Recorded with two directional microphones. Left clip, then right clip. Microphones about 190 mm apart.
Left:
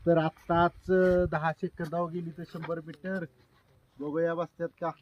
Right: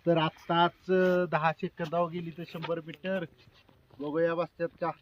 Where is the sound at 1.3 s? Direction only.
65° left (ahead or behind).